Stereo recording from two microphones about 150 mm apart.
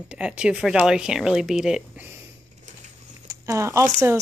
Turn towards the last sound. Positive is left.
turn(degrees=-20)  # may be behind; listen again after turning